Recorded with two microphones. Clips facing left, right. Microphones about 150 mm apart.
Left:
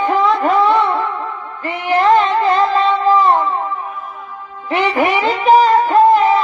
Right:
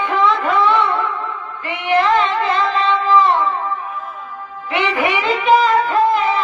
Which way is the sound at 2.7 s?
40° left (ahead or behind).